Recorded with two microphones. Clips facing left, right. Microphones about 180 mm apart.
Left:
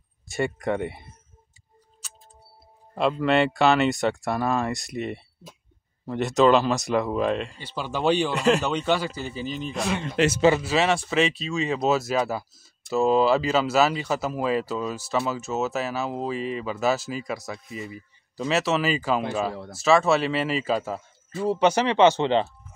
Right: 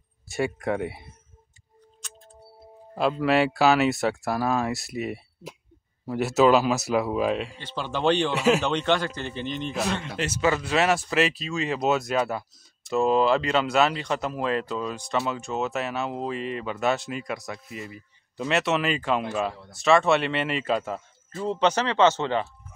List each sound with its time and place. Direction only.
0.3 s speech: 5° right (ahead or behind)
3.0 s speech: 5° right (ahead or behind)
7.5 s speech: 10° left (ahead or behind)
8.4 s speech: 5° right (ahead or behind)
8.6 s speech: 5° left (ahead or behind)
10.1 s a man's voice: 75° left (ahead or behind)
10.6 s speech: centre (ahead or behind)